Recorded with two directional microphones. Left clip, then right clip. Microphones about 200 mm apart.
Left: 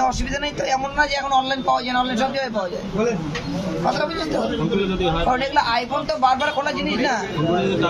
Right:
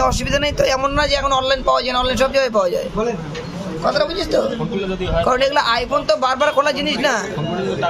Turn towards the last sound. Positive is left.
turn(degrees=-45)  # may be behind; listen again after turning